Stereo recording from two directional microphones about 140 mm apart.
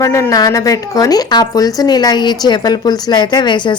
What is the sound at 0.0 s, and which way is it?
A woman's voice, 20° left (ahead or behind).